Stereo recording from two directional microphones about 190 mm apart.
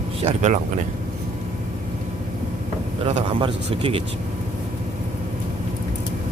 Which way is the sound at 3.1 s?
30° right (ahead or behind).